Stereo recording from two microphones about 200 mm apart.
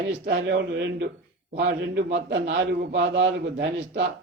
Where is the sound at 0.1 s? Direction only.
55° right (ahead or behind).